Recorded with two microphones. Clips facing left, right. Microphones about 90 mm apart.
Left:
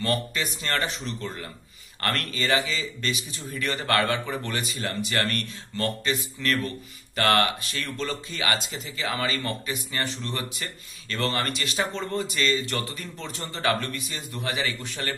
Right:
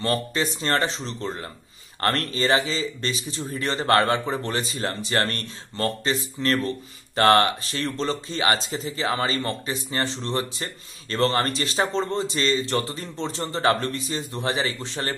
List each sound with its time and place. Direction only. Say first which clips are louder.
0.0 s speech: right 3 dB; 30° right (ahead or behind)